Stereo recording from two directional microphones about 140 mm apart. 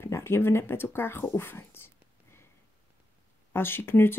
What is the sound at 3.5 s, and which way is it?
Speech, 15° left (ahead or behind).